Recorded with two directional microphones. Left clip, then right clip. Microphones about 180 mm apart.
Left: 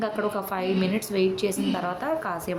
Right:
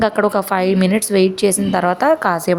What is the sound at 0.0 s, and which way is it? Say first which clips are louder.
A woman's voice: right 12 dB; 50° right (ahead or behind).